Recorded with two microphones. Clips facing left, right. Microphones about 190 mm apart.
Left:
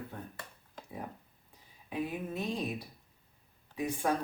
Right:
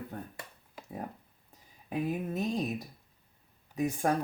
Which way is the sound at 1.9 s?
45° right (ahead or behind).